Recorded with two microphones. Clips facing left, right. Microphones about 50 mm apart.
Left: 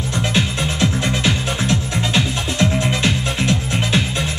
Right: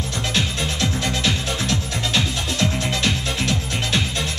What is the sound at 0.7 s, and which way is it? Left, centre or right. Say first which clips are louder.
Music: left 5 dB; centre.